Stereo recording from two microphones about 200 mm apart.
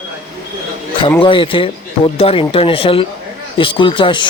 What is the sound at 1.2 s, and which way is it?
Speech, 25° left (ahead or behind).